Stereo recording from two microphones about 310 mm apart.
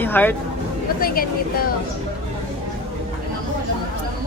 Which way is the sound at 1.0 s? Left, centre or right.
Left.